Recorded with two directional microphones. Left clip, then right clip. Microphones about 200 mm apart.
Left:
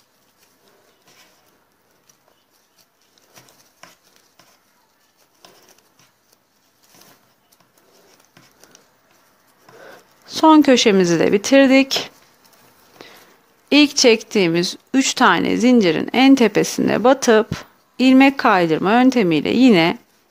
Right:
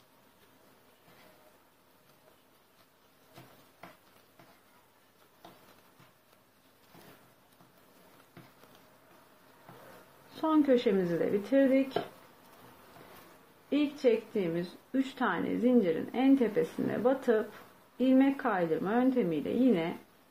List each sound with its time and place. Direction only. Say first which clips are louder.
10.4 s speech: left 15 dB; 55° left (ahead or behind)
13.7 s speech: left 15 dB; 55° left (ahead or behind)